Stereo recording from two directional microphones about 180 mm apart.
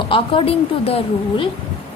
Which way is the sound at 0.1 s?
30° left (ahead or behind).